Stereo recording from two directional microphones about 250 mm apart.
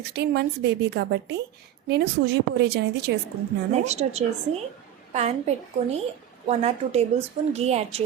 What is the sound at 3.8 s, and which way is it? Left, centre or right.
Speech, right.